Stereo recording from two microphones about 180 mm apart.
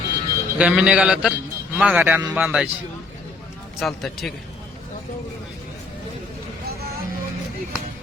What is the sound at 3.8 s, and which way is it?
Speech, centre (ahead or behind).